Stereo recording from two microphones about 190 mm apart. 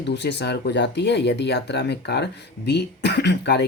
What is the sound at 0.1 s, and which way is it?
Speech, 65° left (ahead or behind).